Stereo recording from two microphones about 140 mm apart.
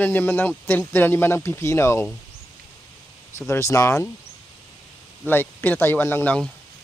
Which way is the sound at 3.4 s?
20° left (ahead or behind).